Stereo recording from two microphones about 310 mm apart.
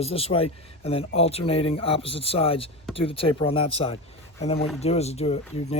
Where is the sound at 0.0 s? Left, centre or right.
Centre.